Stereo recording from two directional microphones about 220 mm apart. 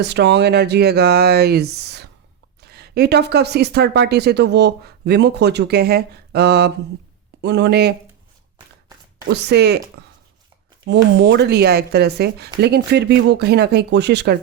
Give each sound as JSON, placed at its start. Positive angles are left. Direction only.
{"t": 0.0, "sound": "speech", "side_deg": -50}
{"t": 9.3, "sound": "speech", "side_deg": -50}
{"t": 10.8, "sound": "speech", "side_deg": -50}